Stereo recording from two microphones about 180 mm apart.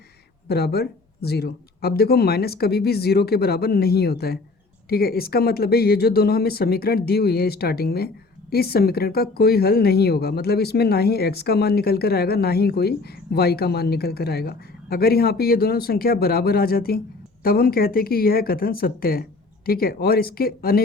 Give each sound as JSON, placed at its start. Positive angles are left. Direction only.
{"t": 0.4, "sound": "speech", "side_deg": 60}